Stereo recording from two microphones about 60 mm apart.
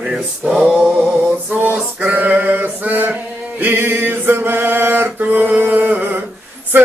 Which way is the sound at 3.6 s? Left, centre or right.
Right.